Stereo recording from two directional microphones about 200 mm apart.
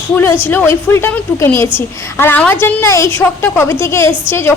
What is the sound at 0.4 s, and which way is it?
A woman's voice, 10° left (ahead or behind).